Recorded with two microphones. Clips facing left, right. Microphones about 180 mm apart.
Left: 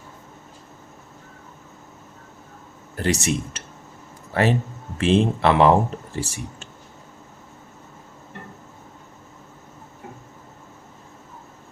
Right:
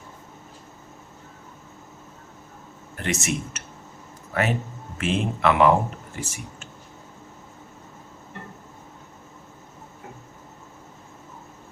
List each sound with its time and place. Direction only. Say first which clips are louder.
2.9 s speech: left 4 dB; 35° left (ahead or behind)